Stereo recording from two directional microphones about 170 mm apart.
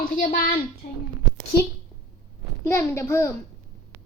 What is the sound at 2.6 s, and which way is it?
Speech, 15° left (ahead or behind).